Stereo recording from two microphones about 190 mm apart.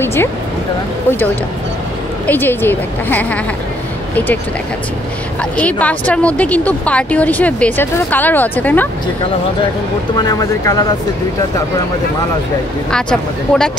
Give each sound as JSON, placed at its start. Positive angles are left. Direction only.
{"t": 0.0, "sound": "music", "side_deg": 10}
{"t": 2.2, "sound": "speech", "side_deg": 10}
{"t": 5.4, "sound": "speech", "side_deg": 5}
{"t": 10.1, "sound": "speech", "side_deg": 20}
{"t": 12.9, "sound": "speech", "side_deg": 5}